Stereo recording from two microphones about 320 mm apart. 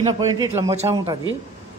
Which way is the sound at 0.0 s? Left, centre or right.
Centre.